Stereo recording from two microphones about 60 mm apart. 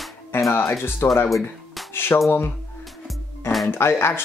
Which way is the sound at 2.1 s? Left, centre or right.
Left.